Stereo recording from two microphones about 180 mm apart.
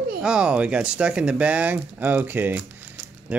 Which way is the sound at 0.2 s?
5° right (ahead or behind).